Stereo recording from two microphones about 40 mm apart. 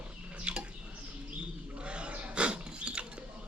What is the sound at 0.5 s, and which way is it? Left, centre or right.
Dishes, right.